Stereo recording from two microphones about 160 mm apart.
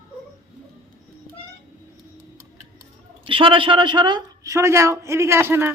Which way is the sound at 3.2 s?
30° right (ahead or behind).